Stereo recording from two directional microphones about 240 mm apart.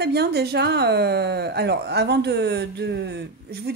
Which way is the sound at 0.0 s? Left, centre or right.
Right.